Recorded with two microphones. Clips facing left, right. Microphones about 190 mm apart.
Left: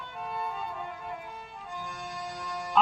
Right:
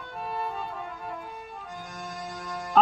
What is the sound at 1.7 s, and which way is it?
Music, 45° right (ahead or behind).